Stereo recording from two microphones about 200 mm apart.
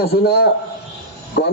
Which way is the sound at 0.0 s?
55° left (ahead or behind).